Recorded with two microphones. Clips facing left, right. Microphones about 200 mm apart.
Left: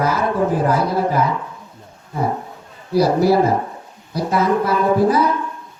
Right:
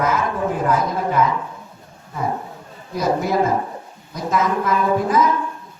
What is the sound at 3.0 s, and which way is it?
Speech, 35° left (ahead or behind).